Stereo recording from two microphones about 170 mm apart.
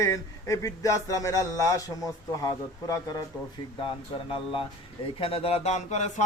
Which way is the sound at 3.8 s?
30° left (ahead or behind).